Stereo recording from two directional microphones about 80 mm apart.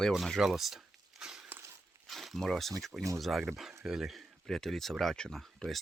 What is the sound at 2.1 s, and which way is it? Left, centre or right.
Speech, centre.